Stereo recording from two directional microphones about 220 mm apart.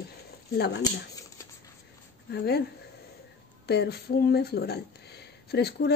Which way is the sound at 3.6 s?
45° left (ahead or behind).